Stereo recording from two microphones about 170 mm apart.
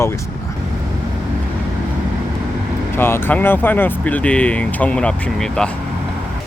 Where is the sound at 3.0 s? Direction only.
15° left (ahead or behind).